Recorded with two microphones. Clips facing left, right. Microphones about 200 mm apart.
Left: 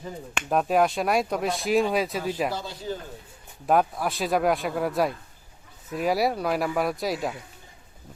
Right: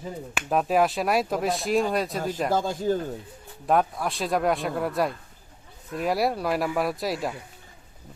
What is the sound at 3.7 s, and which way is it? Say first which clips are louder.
Speech: left 1 dB; centre (ahead or behind).